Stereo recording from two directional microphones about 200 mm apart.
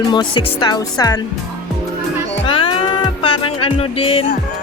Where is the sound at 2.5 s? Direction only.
25° left (ahead or behind).